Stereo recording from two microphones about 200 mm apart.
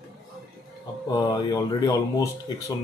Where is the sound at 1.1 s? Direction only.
20° left (ahead or behind).